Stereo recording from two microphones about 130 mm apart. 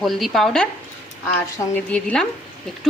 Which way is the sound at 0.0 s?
Centre (ahead or behind).